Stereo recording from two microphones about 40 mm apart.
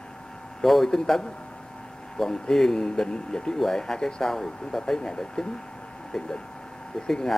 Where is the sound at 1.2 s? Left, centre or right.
Left.